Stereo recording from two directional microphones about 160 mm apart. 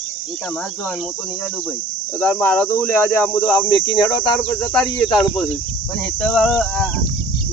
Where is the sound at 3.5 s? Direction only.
30° left (ahead or behind).